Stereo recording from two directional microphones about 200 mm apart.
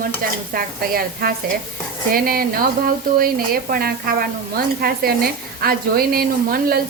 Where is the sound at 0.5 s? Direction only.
45° right (ahead or behind).